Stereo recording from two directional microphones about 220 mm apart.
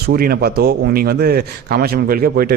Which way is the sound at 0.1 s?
45° right (ahead or behind).